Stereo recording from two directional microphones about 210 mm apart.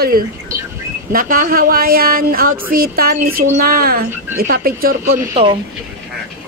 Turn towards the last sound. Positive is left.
turn(degrees=-25)  # may be behind; listen again after turning